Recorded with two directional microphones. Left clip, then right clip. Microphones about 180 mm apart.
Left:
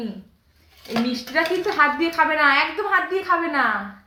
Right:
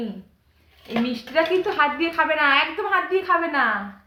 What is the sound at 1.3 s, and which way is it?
A woman's voice, 10° right (ahead or behind).